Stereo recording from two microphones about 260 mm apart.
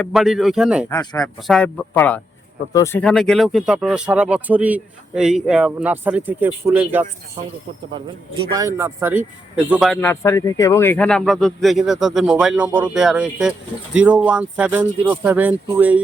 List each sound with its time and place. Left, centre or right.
0.0 s speech: centre
8.5 s speech: centre